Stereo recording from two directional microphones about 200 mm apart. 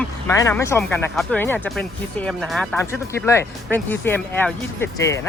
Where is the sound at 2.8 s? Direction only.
15° left (ahead or behind).